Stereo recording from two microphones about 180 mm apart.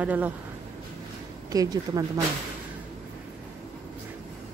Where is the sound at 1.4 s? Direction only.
20° right (ahead or behind).